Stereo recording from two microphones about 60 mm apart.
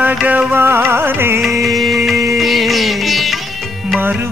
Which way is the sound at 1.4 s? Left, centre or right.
Centre.